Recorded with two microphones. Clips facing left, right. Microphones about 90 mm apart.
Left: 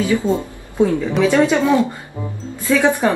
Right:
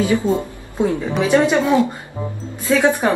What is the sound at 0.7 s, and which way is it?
Speech, 20° right (ahead or behind).